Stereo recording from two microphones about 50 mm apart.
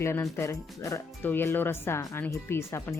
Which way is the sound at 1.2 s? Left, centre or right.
Left.